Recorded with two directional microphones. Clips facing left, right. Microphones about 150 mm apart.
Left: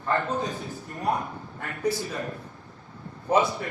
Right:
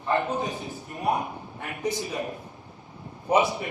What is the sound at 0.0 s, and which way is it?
A man's voice, 15° right (ahead or behind).